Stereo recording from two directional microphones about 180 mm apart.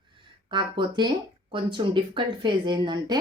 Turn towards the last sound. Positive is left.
turn(degrees=-25)  # may be behind; listen again after turning